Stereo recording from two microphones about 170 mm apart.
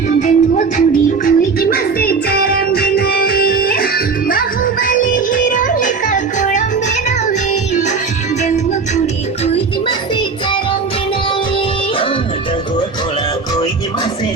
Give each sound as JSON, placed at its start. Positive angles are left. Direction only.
{"t": 0.2, "sound": "music", "side_deg": 50}
{"t": 1.7, "sound": "music", "side_deg": 65}